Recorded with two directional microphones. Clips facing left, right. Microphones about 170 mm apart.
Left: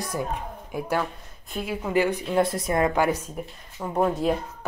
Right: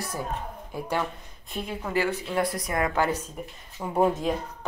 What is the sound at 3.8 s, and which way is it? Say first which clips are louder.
Speech: left 1 dB; 5° right (ahead or behind).